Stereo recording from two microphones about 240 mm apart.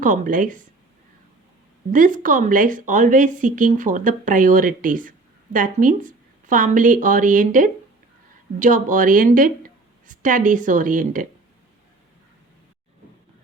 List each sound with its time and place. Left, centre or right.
0.0 s speech: right
1.9 s speech: right